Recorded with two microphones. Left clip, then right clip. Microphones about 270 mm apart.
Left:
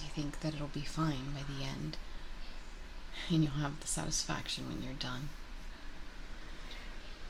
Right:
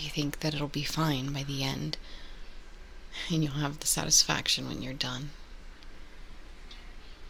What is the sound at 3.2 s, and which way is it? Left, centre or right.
Speech, right.